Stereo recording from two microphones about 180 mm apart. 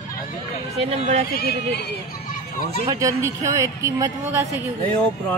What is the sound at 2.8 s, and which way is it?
Speech, 20° right (ahead or behind).